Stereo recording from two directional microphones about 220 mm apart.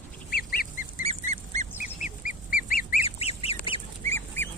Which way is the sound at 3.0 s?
25° left (ahead or behind).